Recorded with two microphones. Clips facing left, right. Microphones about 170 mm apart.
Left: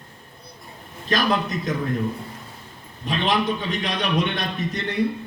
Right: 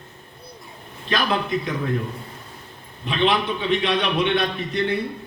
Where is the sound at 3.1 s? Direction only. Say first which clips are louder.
Right 1 dB; 40° left (ahead or behind).